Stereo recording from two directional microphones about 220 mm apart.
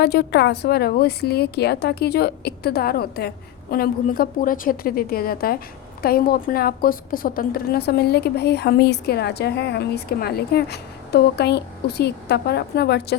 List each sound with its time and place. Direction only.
0.0 s a woman's voice: 50° left (ahead or behind)